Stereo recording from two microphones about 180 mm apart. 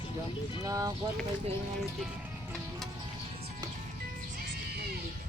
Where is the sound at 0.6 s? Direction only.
20° right (ahead or behind).